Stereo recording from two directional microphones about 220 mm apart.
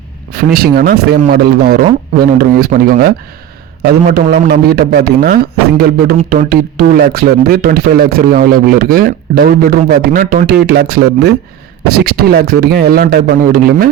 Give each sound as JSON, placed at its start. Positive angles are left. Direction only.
{"t": 0.3, "sound": "speech", "side_deg": -45}